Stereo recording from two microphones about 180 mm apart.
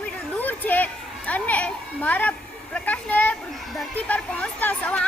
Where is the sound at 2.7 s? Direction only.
10° left (ahead or behind).